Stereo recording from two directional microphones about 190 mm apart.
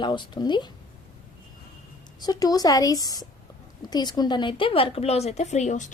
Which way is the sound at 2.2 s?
20° left (ahead or behind).